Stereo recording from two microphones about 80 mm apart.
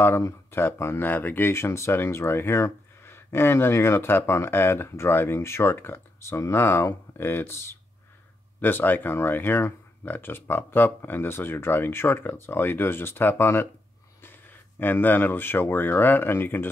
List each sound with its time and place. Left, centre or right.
0.0 s speech: left